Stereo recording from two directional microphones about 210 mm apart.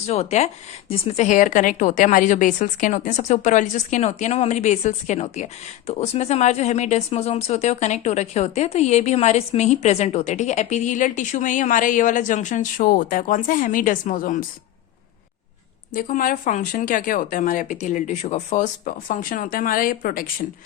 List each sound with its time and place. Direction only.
0.0 s speech: 30° left (ahead or behind)
15.9 s speech: 40° left (ahead or behind)